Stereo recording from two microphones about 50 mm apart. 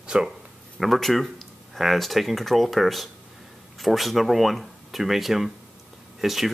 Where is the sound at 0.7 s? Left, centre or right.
Centre.